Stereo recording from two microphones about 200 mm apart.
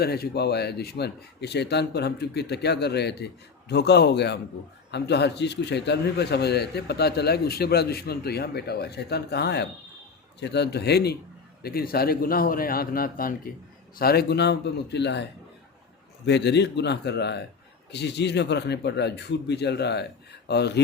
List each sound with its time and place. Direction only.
0.0 s a man's voice: 50° left (ahead or behind)